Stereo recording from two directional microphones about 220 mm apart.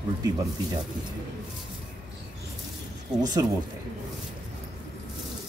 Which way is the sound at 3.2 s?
15° right (ahead or behind).